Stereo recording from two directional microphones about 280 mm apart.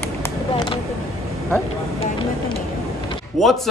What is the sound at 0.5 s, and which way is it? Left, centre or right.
Speech, centre.